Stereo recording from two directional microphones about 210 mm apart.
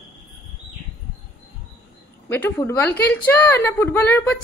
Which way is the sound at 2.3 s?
10° left (ahead or behind).